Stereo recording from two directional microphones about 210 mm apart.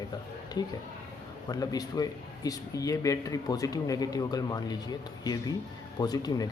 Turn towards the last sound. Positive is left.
turn(degrees=20)  # may be behind; listen again after turning